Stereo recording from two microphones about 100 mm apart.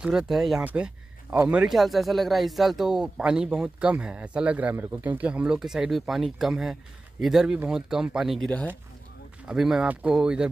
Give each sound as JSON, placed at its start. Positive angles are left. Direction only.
{"t": 0.0, "sound": "speech", "side_deg": -5}
{"t": 0.7, "sound": "a sound", "side_deg": -15}
{"t": 1.5, "sound": "speech", "side_deg": -10}
{"t": 1.8, "sound": "speech", "side_deg": 0}
{"t": 8.4, "sound": "speech", "side_deg": 15}
{"t": 9.5, "sound": "speech", "side_deg": -5}